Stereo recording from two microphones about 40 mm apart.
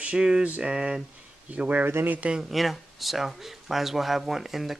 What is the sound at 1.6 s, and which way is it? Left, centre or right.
Speech, right.